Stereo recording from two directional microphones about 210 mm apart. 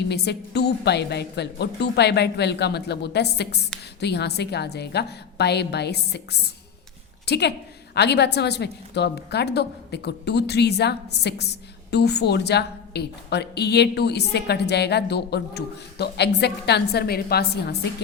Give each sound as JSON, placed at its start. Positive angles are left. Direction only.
{"t": 0.1, "sound": "a woman's voice", "side_deg": 50}